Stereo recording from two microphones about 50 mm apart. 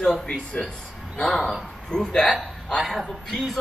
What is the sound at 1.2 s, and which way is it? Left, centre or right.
A man's voice, centre.